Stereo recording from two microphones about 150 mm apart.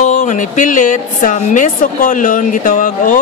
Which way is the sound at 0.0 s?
50° left (ahead or behind).